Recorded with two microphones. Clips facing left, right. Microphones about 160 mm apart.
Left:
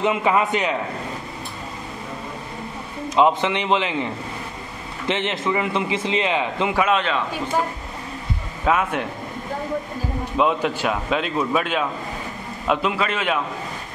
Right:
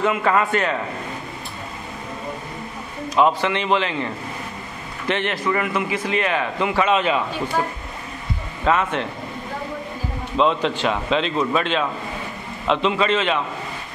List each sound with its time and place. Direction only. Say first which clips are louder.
0.0 s a man's voice: even; 15° left (ahead or behind)
3.2 s a man's voice: even; 20° left (ahead or behind)
6.8 s a man's voice: right 2 dB; 5° right (ahead or behind)
8.6 s a man's voice: right 1 dB; 10° left (ahead or behind)
10.3 s a man's voice: right 1 dB; 10° left (ahead or behind)